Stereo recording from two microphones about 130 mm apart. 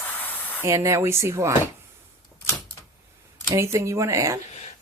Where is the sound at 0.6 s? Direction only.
20° right (ahead or behind).